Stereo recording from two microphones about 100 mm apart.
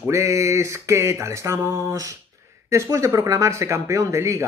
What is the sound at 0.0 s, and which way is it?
Speech, 30° right (ahead or behind).